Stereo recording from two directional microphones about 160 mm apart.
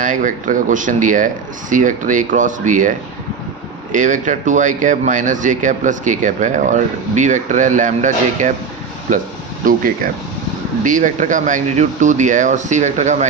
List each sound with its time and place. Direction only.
0.0 s speech: 55° right (ahead or behind)
3.9 s speech: 50° right (ahead or behind)
9.6 s speech: 60° right (ahead or behind)